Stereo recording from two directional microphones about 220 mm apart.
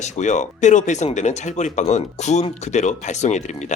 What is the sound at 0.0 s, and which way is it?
Speech, 35° left (ahead or behind).